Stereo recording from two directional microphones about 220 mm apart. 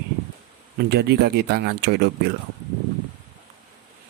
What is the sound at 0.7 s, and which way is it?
Speech, 50° right (ahead or behind).